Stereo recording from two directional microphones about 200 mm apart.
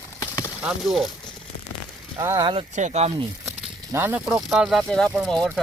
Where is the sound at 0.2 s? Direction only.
15° left (ahead or behind).